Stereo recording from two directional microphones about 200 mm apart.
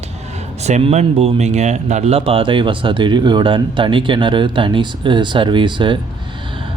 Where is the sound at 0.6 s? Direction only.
30° right (ahead or behind).